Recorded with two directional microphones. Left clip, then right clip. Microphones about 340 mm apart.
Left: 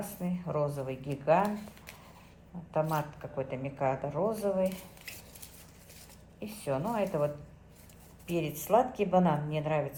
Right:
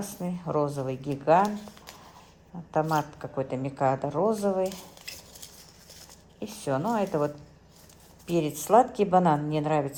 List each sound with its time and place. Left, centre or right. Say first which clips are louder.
0.0 s speech: right 4 dB; right
2.7 s speech: right 5 dB; right
6.4 s speech: right 5 dB; right
8.3 s speech: right 6 dB; right